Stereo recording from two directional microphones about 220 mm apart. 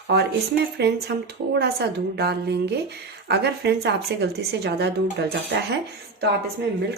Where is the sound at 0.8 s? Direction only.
50° right (ahead or behind).